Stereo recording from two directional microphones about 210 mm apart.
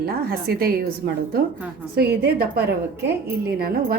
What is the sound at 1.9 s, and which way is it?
A woman's voice, 50° right (ahead or behind).